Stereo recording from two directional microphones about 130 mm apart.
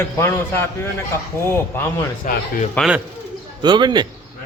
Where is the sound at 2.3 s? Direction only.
90° left.